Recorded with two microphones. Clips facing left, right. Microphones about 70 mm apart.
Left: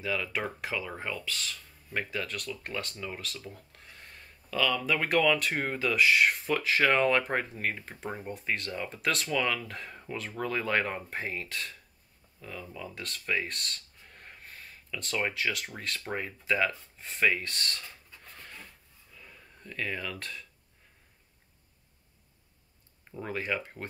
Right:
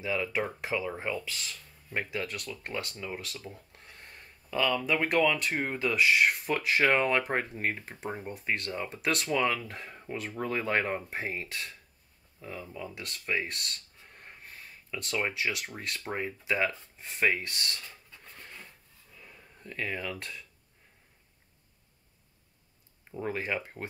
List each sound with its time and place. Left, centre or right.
0.0 s speech: centre
6.4 s speech: centre
7.7 s speech: centre
8.3 s speech: right
15.0 s speech: centre
19.2 s speech: centre
23.2 s speech: centre